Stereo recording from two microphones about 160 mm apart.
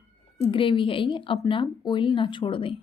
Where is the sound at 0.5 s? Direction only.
30° left (ahead or behind).